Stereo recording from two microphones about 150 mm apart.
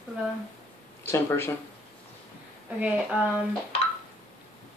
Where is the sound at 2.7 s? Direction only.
10° right (ahead or behind).